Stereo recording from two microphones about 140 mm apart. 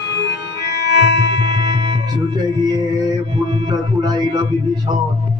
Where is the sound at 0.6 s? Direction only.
30° right (ahead or behind).